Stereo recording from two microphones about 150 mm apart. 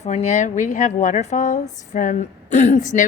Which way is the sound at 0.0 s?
50° left (ahead or behind).